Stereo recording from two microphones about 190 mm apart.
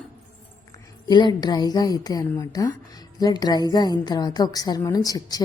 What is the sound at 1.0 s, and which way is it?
A woman's voice, 25° left (ahead or behind).